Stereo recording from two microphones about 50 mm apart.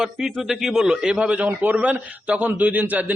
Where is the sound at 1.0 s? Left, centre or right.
Right.